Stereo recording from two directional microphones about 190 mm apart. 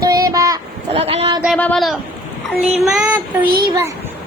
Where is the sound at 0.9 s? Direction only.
30° right (ahead or behind).